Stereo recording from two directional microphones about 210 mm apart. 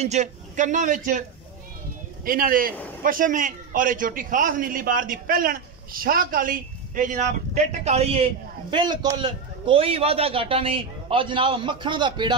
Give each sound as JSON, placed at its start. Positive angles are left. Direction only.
{"t": 0.0, "sound": "a man's voice", "side_deg": -35}
{"t": 2.2, "sound": "a man's voice", "side_deg": -40}